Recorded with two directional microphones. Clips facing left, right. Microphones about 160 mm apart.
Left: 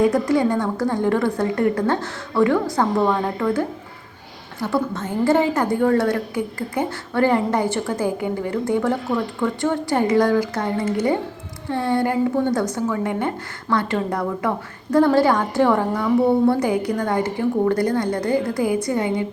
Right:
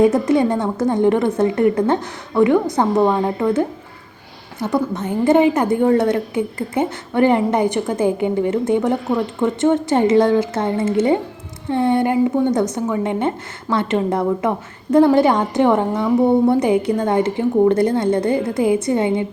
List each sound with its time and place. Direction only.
0.0 s a woman's voice: 25° right (ahead or behind)